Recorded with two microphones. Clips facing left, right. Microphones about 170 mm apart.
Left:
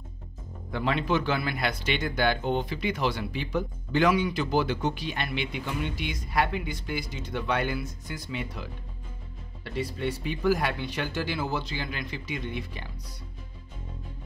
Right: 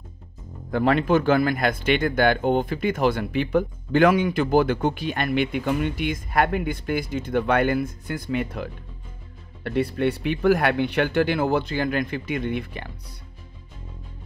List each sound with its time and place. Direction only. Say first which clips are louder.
0.7 s speech: right 7 dB; 50° right (ahead or behind)